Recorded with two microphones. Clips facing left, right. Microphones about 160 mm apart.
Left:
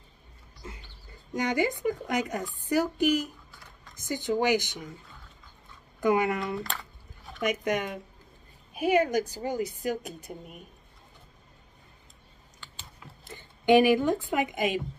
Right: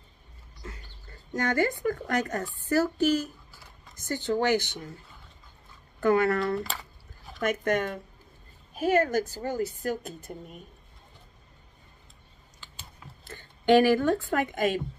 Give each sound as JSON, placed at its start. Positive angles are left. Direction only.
{"t": 0.6, "sound": "a sound", "side_deg": 20}
{"t": 1.3, "sound": "speech", "side_deg": 15}
{"t": 5.9, "sound": "speech", "side_deg": 15}
{"t": 6.4, "sound": "speech", "side_deg": 0}
{"t": 7.4, "sound": "speech", "side_deg": 10}
{"t": 13.2, "sound": "speech", "side_deg": 15}